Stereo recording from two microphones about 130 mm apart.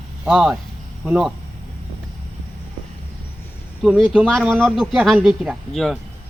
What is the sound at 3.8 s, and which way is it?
Speech, 5° right (ahead or behind).